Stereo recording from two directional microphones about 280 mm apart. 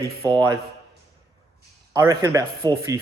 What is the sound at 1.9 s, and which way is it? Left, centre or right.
Speech, centre.